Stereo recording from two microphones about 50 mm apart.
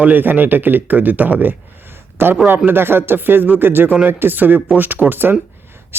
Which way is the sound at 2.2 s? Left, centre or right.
Right.